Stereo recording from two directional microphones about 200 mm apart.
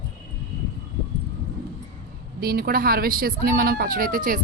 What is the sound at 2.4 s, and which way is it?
Speech, 50° right (ahead or behind).